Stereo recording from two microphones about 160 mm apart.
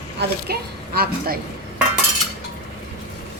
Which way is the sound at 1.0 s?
70° right (ahead or behind).